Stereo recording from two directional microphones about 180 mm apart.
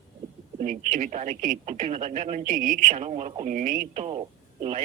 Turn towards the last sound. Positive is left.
turn(degrees=-35)  # may be behind; listen again after turning